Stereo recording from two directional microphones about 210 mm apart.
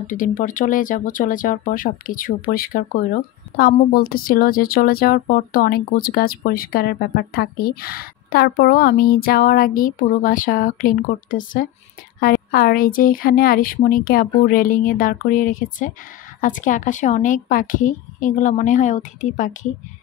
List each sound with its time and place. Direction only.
0.0 s a woman's voice: 40° left (ahead or behind)